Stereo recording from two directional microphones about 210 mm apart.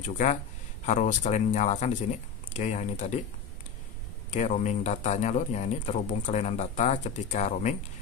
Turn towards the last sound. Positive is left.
turn(degrees=35)  # may be behind; listen again after turning